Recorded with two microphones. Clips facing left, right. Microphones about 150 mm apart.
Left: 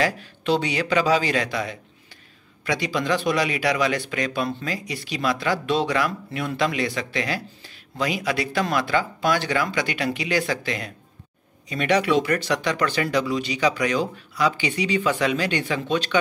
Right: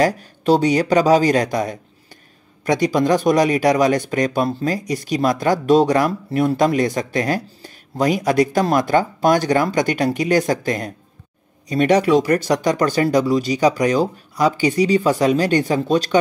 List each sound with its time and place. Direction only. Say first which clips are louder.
0.0 s speech: right 6 dB; 40° right (ahead or behind)